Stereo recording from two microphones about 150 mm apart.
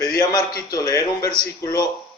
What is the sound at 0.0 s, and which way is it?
A man's voice, 25° left (ahead or behind).